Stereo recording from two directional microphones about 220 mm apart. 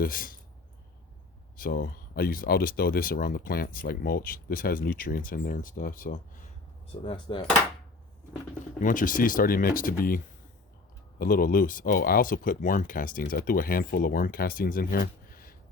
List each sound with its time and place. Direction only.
0.0 s speech: 40° left (ahead or behind)
1.5 s speech: 40° left (ahead or behind)
7.0 s speech: 20° left (ahead or behind)
8.8 s speech: 35° left (ahead or behind)